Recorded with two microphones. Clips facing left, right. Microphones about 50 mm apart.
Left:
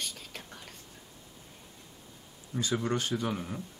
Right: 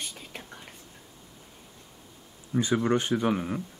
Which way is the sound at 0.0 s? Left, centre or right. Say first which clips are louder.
Right 1 dB; centre.